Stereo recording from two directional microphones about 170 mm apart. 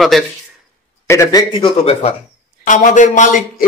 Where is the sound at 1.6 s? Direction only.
35° left (ahead or behind).